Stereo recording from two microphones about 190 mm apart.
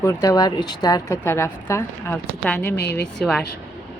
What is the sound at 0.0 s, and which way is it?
Speech, 15° left (ahead or behind).